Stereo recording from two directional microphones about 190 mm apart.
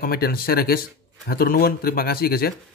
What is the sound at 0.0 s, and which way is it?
A man's voice, 50° left (ahead or behind).